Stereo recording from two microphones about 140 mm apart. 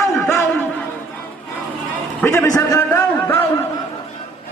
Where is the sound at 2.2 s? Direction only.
20° left (ahead or behind).